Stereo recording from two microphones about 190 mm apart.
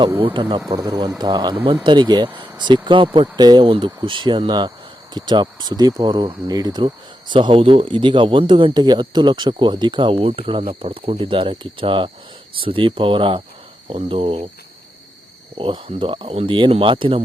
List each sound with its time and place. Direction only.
0.2 s speech: 25° right (ahead or behind)
15.5 s speech: 25° right (ahead or behind)